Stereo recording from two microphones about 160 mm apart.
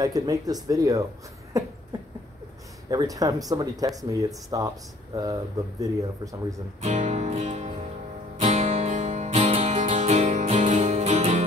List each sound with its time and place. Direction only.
0.0 s speech: 25° right (ahead or behind)
2.9 s speech: 25° right (ahead or behind)
6.8 s music: 45° right (ahead or behind)